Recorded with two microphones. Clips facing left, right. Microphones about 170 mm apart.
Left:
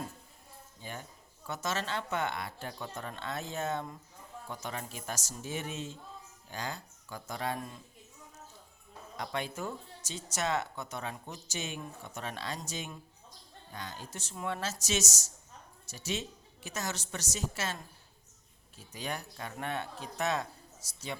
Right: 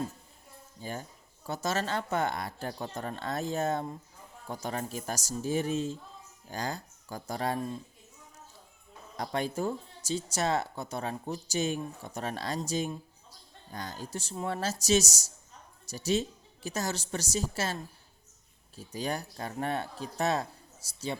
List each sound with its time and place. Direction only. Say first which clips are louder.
0.8 s speech: right 5 dB; 40° right (ahead or behind)
9.1 s speech: right 5 dB; 40° right (ahead or behind)
18.9 s speech: right 5 dB; 35° right (ahead or behind)